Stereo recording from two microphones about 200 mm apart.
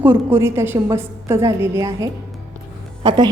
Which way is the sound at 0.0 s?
10° right (ahead or behind).